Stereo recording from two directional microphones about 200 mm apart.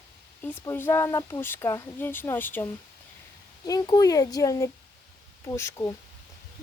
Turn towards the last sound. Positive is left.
turn(degrees=15)  # may be behind; listen again after turning